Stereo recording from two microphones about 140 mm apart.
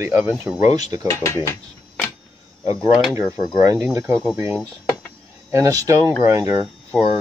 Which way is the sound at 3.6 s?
20° right (ahead or behind).